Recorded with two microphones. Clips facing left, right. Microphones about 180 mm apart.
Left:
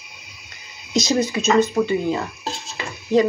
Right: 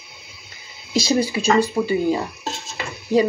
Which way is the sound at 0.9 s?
30° right (ahead or behind).